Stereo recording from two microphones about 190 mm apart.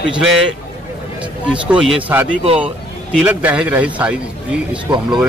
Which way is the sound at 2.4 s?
30° right (ahead or behind).